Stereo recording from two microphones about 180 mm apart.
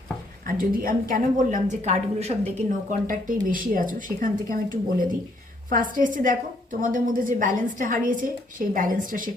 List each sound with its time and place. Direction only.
0.4 s a woman's voice: 50° right (ahead or behind)
3.1 s a woman's voice: 50° right (ahead or behind)